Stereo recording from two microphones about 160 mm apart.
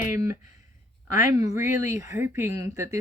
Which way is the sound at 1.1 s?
15° right (ahead or behind).